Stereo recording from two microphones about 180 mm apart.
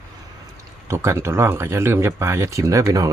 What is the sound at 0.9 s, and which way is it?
Speech, 15° right (ahead or behind).